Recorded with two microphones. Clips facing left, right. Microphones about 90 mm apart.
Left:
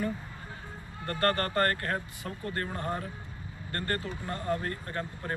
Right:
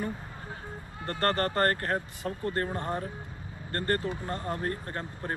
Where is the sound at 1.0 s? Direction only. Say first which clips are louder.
Right 1 dB; 35° right (ahead or behind).